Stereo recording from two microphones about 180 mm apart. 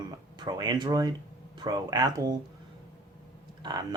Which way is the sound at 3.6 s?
20° right (ahead or behind).